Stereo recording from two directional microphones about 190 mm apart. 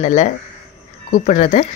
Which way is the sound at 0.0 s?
40° left (ahead or behind).